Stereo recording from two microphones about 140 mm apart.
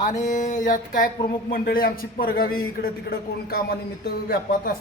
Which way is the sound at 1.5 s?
90° left.